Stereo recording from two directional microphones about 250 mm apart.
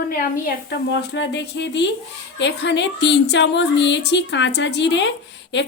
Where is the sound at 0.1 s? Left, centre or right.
Left.